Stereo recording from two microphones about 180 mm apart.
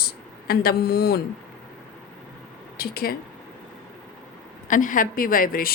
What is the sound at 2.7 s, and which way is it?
Speech, 55° left (ahead or behind).